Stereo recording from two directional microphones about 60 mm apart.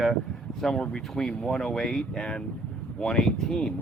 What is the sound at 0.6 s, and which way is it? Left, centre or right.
Speech, centre.